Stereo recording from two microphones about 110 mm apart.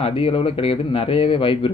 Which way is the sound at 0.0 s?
60° left (ahead or behind).